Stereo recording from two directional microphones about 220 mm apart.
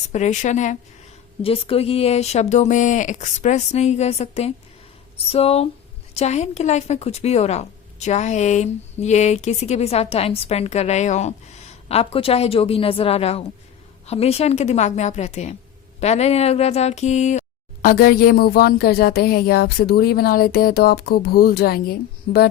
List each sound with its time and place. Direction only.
0.1 s a woman's voice: 30° left (ahead or behind)